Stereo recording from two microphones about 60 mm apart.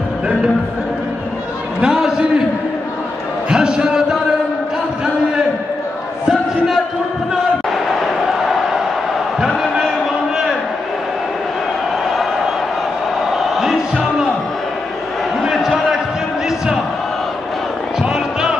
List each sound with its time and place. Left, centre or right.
1.8 s a man's voice: centre
3.4 s a man's voice: centre
7.7 s crowd: centre
13.6 s music: centre
15.4 s a sound: centre
18.0 s music: centre